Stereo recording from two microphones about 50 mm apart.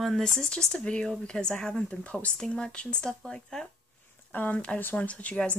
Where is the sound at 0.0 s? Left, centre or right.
Centre.